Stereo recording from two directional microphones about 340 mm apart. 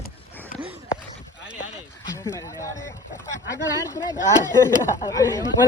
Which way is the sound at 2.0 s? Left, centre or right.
Centre.